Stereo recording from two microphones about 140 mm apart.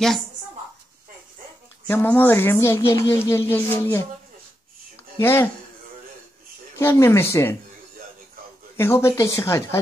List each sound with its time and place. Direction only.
1.9 s speech: 15° left (ahead or behind)
5.2 s speech: 15° left (ahead or behind)
6.8 s speech: 20° left (ahead or behind)
8.7 s speech: 20° left (ahead or behind)